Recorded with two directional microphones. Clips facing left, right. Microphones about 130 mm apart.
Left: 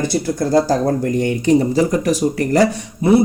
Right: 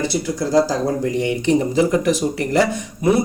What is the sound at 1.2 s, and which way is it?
Speech, 40° left (ahead or behind).